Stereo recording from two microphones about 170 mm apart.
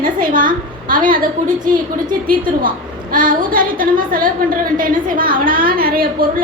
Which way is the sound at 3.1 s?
50° right (ahead or behind).